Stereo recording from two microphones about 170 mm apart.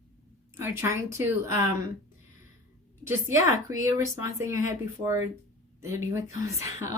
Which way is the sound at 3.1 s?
20° right (ahead or behind).